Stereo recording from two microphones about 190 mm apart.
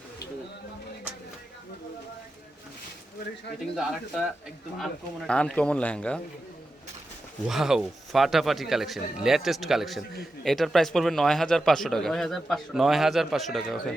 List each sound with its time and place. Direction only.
3.8 s a man's voice: 5° right (ahead or behind)
7.4 s a man's voice: centre (ahead or behind)